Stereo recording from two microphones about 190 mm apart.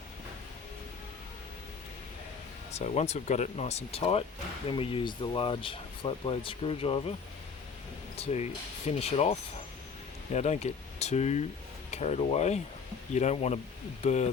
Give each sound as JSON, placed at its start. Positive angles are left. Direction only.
{"t": 2.7, "sound": "speech", "side_deg": 35}
{"t": 8.1, "sound": "speech", "side_deg": 35}